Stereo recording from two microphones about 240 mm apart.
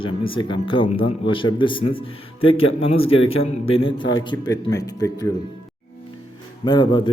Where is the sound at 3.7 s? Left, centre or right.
Left.